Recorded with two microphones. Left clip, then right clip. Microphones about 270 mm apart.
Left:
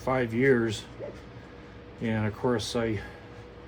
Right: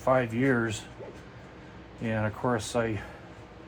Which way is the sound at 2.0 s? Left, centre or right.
Centre.